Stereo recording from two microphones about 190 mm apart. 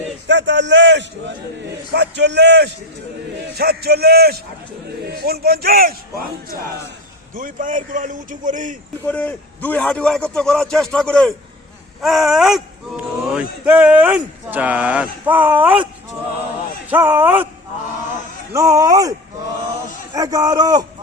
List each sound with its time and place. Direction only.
0.3 s a man's voice: 70° right (ahead or behind); by 6.2 s 50° right (ahead or behind)
7.3 s a man's voice: 45° right (ahead or behind)
9.0 s a man's voice: 10° left (ahead or behind); by 15.9 s 5° right (ahead or behind)
16.9 s speech: 10° right (ahead or behind)
18.5 s speech: 15° right (ahead or behind)
20.1 s a man's voice: 20° right (ahead or behind)